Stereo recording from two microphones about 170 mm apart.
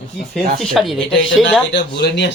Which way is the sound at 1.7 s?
85° left.